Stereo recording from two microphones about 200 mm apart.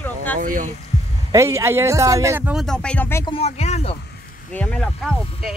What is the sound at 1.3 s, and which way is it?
A man's voice, 15° right (ahead or behind).